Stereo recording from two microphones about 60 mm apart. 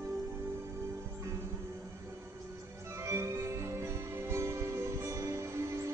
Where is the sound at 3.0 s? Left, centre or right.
Right.